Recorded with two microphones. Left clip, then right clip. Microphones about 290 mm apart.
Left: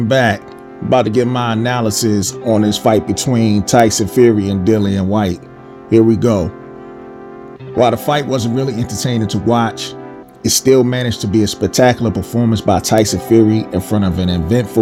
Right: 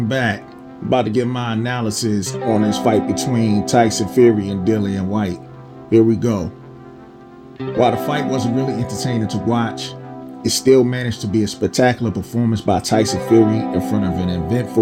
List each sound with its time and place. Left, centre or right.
0.1 s speech: left
7.8 s speech: left